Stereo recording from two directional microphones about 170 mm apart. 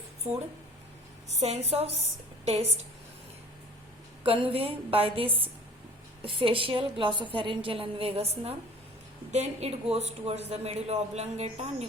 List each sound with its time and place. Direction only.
0.2 s a woman's voice: 40° right (ahead or behind)
4.2 s a woman's voice: 35° right (ahead or behind)